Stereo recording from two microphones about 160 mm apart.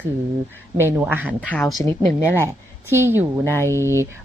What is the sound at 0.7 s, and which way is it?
Speech, 15° right (ahead or behind).